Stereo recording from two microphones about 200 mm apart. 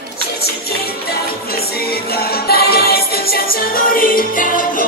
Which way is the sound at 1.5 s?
50° left (ahead or behind).